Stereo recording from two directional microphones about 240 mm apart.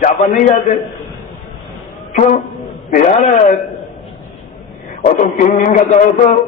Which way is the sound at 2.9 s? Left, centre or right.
Left.